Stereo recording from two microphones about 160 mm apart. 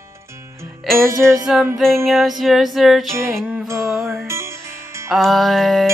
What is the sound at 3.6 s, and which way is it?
Music, 15° right (ahead or behind).